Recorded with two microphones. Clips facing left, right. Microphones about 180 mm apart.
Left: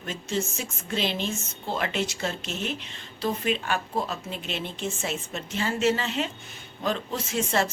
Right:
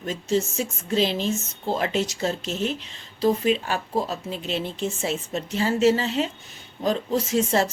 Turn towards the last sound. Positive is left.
turn(degrees=-40)  # may be behind; listen again after turning